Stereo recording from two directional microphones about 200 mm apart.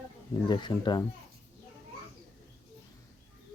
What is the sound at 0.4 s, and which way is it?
Speech, 20° left (ahead or behind).